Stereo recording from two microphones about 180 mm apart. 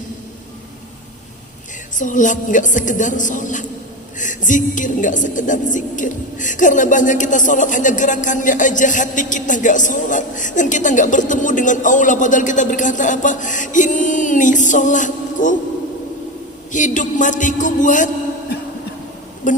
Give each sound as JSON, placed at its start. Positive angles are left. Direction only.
{"t": 2.0, "sound": "a woman's voice", "side_deg": 45}
{"t": 16.7, "sound": "a woman's voice", "side_deg": 45}
{"t": 19.4, "sound": "a woman's voice", "side_deg": 45}